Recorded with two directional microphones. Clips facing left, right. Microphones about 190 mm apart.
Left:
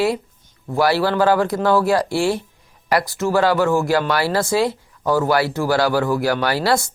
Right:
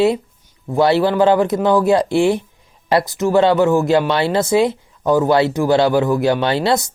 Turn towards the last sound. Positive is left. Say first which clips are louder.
# right 2 dB
turn(degrees=-20)  # may be behind; listen again after turning